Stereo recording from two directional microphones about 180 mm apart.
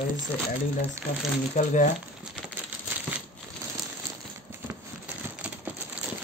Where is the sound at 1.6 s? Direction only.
45° left (ahead or behind).